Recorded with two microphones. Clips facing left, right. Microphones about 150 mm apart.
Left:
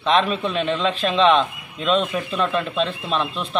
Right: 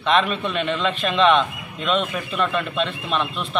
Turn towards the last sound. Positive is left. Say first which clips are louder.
# left 1 dB
turn(degrees=0)  # may be behind; listen again after turning